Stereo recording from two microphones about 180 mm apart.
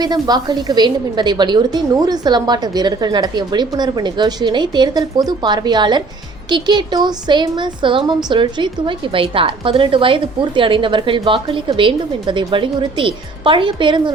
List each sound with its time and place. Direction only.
0.0 s a woman's voice: 20° right (ahead or behind)